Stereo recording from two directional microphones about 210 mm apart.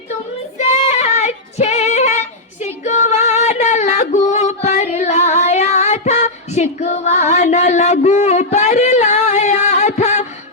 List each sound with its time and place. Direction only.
0.6 s female singing: 30° left (ahead or behind)